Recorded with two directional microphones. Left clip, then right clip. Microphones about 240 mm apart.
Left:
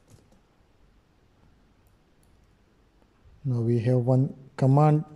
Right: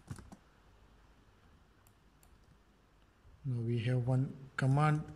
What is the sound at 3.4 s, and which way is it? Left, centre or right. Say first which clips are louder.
Speech: left 13 dB; left.